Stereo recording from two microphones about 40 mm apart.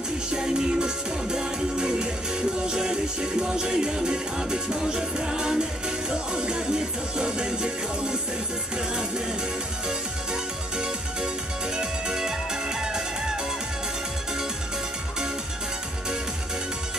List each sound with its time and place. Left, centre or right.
0.3 s music: centre
9.8 s music: centre